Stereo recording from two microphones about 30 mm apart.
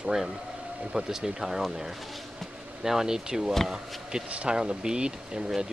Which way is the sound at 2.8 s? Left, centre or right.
Centre.